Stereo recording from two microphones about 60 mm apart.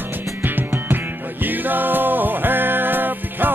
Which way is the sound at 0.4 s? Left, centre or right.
Right.